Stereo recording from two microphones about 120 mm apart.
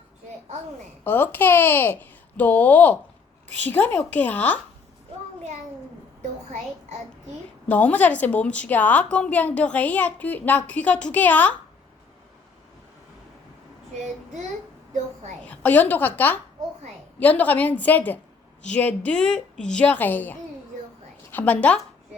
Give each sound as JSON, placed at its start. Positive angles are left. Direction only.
{"t": 1.0, "sound": "a woman's voice", "side_deg": 15}
{"t": 7.7, "sound": "a woman's voice", "side_deg": 15}
{"t": 15.4, "sound": "a woman's voice", "side_deg": 15}